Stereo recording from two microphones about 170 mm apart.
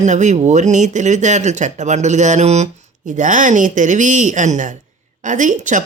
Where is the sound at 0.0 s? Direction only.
45° right (ahead or behind).